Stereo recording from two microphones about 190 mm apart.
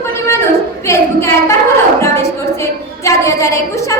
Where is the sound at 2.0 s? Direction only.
15° left (ahead or behind).